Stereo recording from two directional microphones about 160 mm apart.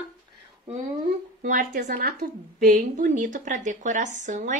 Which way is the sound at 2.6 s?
50° right (ahead or behind).